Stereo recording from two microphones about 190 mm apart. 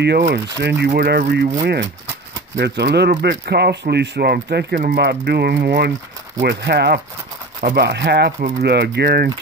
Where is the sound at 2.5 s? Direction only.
60° right (ahead or behind).